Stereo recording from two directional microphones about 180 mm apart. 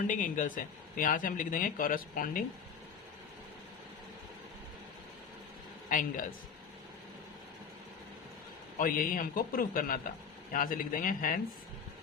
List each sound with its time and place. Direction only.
0.1 s speech: 45° left (ahead or behind)
5.9 s speech: 45° left (ahead or behind)
8.8 s speech: 50° left (ahead or behind)